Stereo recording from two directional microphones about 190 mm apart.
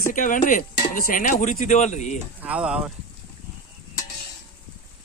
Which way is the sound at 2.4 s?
5° right (ahead or behind).